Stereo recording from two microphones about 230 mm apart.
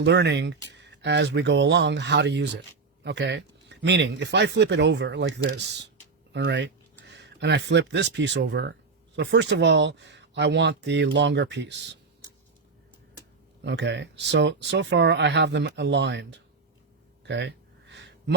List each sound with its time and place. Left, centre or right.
0.0 s speech: right
13.7 s speech: right
17.2 s a sound: right